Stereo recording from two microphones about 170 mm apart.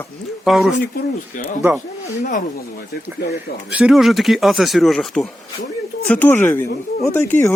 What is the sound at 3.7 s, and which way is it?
Speech, centre (ahead or behind).